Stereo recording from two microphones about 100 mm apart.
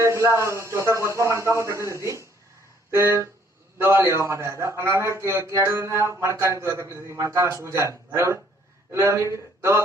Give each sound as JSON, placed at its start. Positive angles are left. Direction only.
{"t": 0.3, "sound": "a man's voice", "side_deg": -30}